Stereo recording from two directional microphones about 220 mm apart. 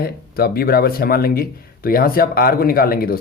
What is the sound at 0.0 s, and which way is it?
Speech, 45° left (ahead or behind).